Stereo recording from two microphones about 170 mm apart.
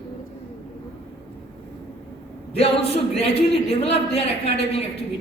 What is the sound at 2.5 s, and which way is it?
A woman's voice, 35° left (ahead or behind).